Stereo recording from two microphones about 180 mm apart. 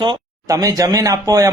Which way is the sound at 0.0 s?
20° right (ahead or behind).